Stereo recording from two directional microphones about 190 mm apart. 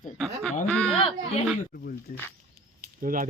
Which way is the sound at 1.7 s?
50° left (ahead or behind).